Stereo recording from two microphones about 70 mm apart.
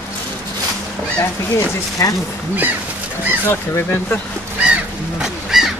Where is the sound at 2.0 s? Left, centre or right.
Left.